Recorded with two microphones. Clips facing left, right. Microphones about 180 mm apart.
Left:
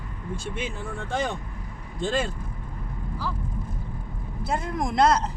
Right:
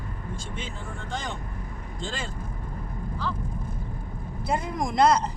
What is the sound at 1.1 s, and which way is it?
Speech, 60° left (ahead or behind).